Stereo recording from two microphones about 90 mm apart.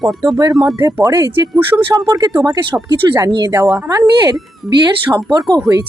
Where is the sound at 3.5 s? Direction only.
35° right (ahead or behind).